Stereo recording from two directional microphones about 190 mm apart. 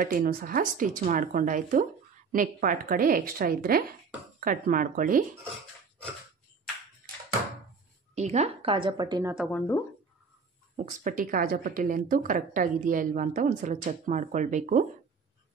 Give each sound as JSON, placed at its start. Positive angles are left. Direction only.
{"t": 0.0, "sound": "speech", "side_deg": -50}
{"t": 8.1, "sound": "a woman's voice", "side_deg": -35}
{"t": 9.2, "sound": "speech", "side_deg": -5}
{"t": 9.5, "sound": "speech", "side_deg": 5}
{"t": 10.8, "sound": "speech", "side_deg": -45}